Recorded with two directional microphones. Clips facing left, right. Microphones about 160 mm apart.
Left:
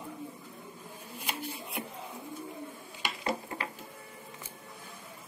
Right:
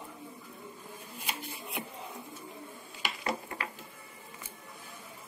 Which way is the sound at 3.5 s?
25° left (ahead or behind).